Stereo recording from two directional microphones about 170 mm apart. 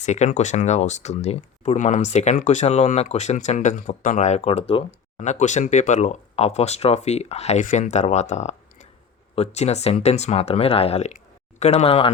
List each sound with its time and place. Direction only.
0.0 s speech: 45° left (ahead or behind)